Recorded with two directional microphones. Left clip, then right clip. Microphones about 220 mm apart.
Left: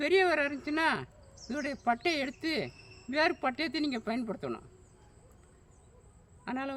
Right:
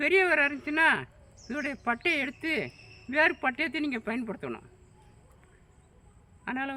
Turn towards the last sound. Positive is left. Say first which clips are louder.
# right 3 dB
turn(degrees=15)  # may be behind; listen again after turning